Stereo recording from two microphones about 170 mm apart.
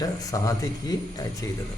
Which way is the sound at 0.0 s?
20° left (ahead or behind).